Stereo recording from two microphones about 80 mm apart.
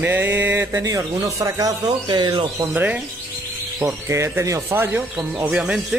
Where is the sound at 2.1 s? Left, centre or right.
Right.